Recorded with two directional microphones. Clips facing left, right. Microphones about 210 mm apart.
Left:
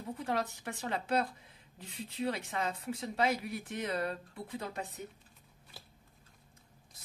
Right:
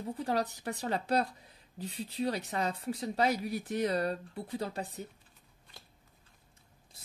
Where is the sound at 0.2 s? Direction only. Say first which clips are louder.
Right 3 dB; 35° right (ahead or behind).